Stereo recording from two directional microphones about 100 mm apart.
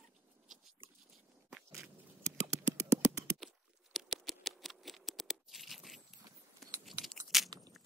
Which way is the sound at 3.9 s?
Centre (ahead or behind).